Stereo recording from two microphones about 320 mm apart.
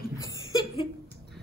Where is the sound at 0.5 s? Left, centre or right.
Centre.